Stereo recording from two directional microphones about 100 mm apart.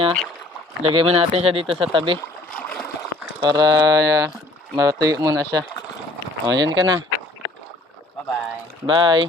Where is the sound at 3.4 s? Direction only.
45° right (ahead or behind).